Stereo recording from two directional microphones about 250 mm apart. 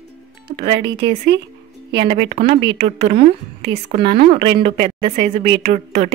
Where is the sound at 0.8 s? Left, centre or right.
Right.